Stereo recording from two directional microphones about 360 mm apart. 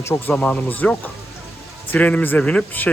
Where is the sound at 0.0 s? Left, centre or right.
Centre.